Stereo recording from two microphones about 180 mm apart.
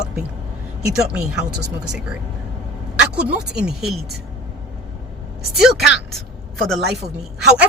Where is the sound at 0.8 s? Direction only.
5° right (ahead or behind).